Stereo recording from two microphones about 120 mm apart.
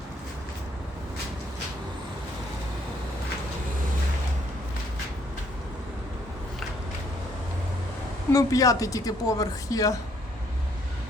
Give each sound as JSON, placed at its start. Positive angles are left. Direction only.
{"t": 8.3, "sound": "speech", "side_deg": 30}